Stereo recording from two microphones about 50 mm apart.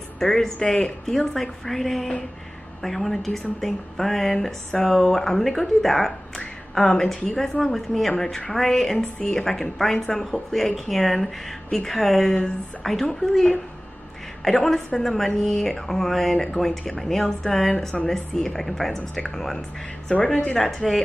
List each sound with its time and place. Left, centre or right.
0.2 s a woman's voice: centre
20.2 s speech: centre
20.5 s speech: centre